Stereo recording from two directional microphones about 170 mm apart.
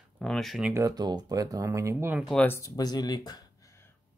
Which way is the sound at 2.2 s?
10° left (ahead or behind).